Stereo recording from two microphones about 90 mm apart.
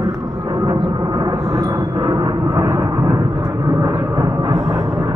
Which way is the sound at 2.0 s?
45° right (ahead or behind).